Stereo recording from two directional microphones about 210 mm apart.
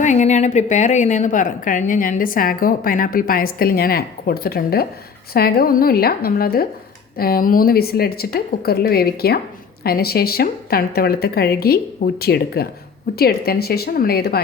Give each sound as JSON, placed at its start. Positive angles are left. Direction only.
{"t": 0.0, "sound": "a woman's voice", "side_deg": 35}